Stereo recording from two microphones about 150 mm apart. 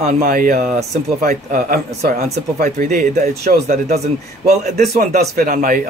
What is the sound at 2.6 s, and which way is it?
Speech, 65° right (ahead or behind).